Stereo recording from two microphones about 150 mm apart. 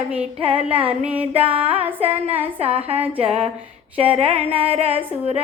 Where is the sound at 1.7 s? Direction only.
40° right (ahead or behind).